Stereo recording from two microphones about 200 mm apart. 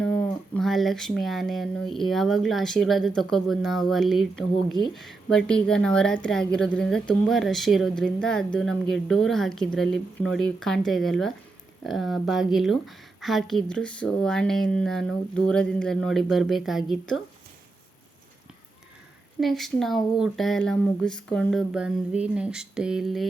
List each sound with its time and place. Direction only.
0.0 s a woman's voice: 5° left (ahead or behind)
19.4 s a woman's voice: centre (ahead or behind)